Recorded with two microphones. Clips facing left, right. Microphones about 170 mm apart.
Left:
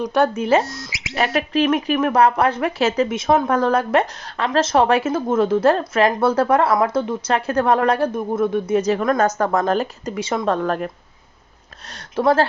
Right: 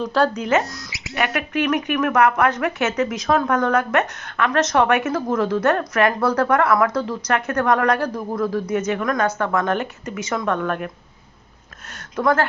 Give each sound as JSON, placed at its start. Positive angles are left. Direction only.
{"t": 0.0, "sound": "speech", "side_deg": 20}
{"t": 12.1, "sound": "speech", "side_deg": 25}